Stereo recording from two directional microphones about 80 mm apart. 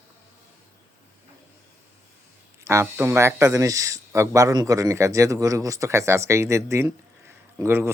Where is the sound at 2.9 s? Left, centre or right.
Right.